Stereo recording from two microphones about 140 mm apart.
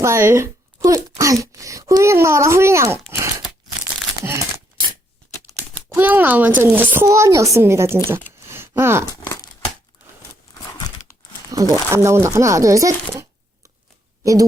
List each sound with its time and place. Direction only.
0.0 s speech: 20° right (ahead or behind)
4.2 s crumpling: 20° right (ahead or behind)
5.9 s speech: 10° right (ahead or behind)
8.4 s a sound: 15° right (ahead or behind)
10.7 s crumpling: 30° left (ahead or behind)
11.5 s speech: 25° right (ahead or behind)